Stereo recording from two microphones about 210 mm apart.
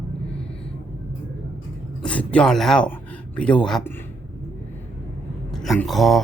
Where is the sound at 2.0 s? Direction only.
5° left (ahead or behind).